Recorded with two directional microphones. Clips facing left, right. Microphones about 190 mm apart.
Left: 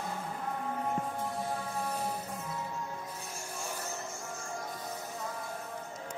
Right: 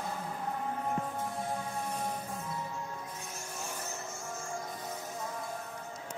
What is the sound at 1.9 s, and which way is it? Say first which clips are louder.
Music: left 1 dB; 5° left (ahead or behind).